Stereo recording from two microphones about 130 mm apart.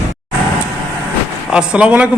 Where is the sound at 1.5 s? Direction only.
10° right (ahead or behind).